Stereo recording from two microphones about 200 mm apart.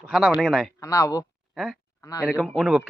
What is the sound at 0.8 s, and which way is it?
Speech, 15° left (ahead or behind).